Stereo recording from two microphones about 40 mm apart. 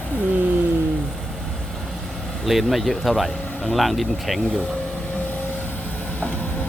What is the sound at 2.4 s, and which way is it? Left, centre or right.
Speech, centre.